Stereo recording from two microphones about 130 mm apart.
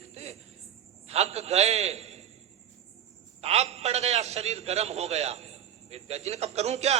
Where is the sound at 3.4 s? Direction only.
55° right (ahead or behind).